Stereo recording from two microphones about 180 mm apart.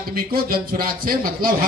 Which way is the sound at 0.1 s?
55° right (ahead or behind).